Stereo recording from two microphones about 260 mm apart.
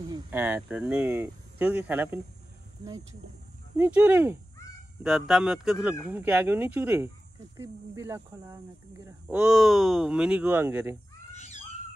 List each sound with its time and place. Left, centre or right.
0.1 s speech: centre
3.7 s speech: centre
11.3 s a sound: left